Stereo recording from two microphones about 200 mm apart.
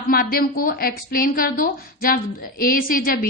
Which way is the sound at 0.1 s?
50° left (ahead or behind).